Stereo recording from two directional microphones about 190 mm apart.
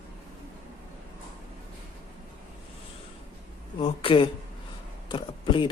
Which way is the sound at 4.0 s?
25° left (ahead or behind).